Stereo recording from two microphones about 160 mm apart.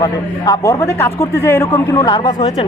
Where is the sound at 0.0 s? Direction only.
25° left (ahead or behind).